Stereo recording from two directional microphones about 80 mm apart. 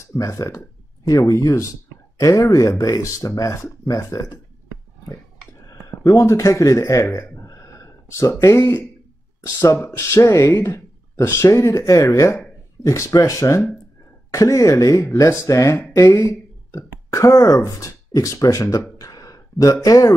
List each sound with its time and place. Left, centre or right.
0.1 s speech: left
5.7 s a man's voice: left
7.2 s a sound: left
9.6 s speech: left